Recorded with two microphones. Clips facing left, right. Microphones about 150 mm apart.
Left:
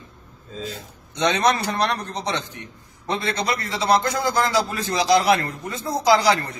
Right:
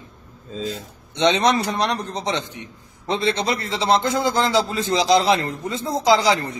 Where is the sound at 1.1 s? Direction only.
25° right (ahead or behind).